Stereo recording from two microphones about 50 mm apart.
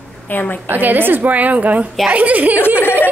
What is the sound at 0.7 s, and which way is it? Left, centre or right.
A woman's voice, right.